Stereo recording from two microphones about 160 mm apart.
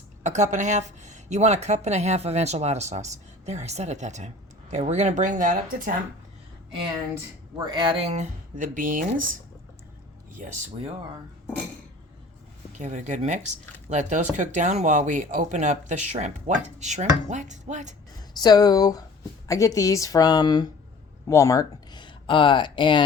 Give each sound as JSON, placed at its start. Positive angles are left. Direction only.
{"t": 0.2, "sound": "speech", "side_deg": -50}
{"t": 7.6, "sound": "speech", "side_deg": -25}
{"t": 12.8, "sound": "speech", "side_deg": -50}
{"t": 18.2, "sound": "speech", "side_deg": 25}